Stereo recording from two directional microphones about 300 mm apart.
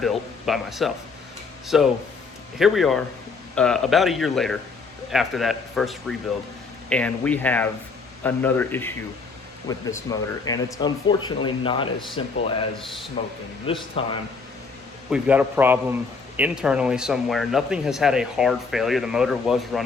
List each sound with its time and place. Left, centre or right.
0.0 s speech: centre
15.1 s a man's voice: centre